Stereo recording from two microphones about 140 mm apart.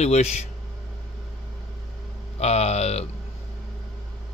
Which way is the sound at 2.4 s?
50° left (ahead or behind).